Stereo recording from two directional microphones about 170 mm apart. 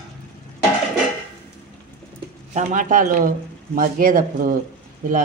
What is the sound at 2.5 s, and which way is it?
A man's voice, 50° right (ahead or behind).